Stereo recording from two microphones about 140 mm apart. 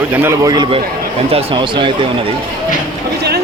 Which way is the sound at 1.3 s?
40° right (ahead or behind).